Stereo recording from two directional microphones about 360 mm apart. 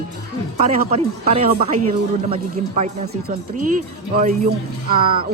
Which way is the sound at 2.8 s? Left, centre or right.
Right.